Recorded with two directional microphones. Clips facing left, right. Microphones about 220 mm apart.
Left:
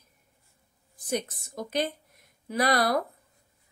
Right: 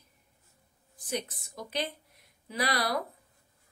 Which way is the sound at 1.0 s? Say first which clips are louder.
Left 5 dB; 45° left (ahead or behind).